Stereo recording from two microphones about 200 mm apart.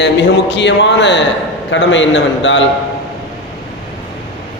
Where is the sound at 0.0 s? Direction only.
60° left (ahead or behind).